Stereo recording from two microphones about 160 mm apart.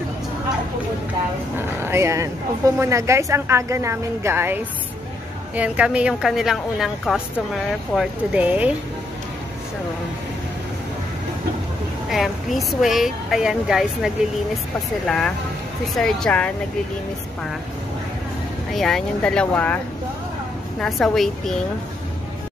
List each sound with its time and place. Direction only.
1.8 s a woman's voice: 15° right (ahead or behind)
5.6 s a woman's voice: 10° right (ahead or behind)
12.1 s a woman's voice: centre (ahead or behind)
18.7 s a woman's voice: centre (ahead or behind)
20.8 s a woman's voice: centre (ahead or behind)